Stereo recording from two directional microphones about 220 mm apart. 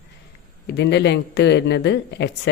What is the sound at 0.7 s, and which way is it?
Speech, 50° left (ahead or behind).